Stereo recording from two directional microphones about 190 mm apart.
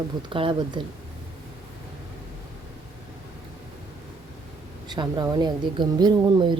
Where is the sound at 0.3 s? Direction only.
25° right (ahead or behind).